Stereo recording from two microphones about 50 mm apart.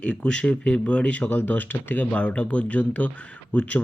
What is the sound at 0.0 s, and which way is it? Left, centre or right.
Speech, centre.